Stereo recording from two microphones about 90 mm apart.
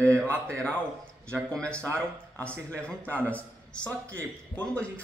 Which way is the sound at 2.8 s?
15° left (ahead or behind).